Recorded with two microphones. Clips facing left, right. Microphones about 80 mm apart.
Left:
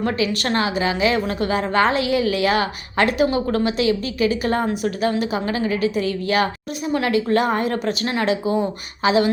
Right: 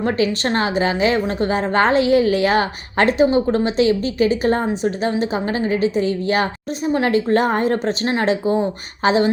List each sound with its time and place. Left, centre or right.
0.0 s a woman's voice: right